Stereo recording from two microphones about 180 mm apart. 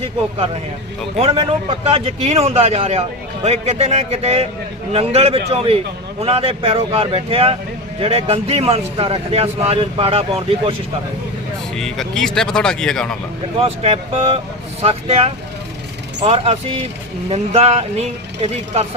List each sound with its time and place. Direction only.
0.0 s a man's voice: 35° right (ahead or behind)
11.8 s speech: centre (ahead or behind)
13.6 s a man's voice: 35° right (ahead or behind)